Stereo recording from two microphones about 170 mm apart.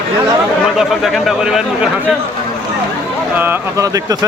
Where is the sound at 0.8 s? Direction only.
Centre (ahead or behind).